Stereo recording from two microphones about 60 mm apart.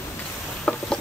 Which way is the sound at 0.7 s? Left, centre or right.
Centre.